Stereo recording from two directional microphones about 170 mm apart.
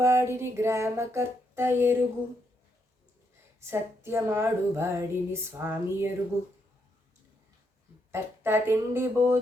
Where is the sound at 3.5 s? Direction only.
15° right (ahead or behind).